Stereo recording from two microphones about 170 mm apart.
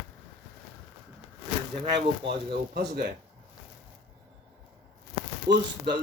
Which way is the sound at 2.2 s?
90° right.